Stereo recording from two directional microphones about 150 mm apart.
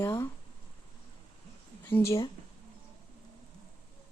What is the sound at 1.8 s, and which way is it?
Speech, 15° left (ahead or behind).